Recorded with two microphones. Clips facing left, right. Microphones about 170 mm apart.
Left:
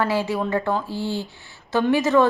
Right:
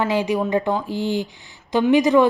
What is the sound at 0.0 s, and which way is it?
A woman's voice, 15° right (ahead or behind).